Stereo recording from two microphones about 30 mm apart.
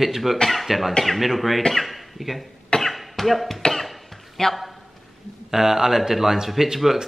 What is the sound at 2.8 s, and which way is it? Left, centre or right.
Cough, centre.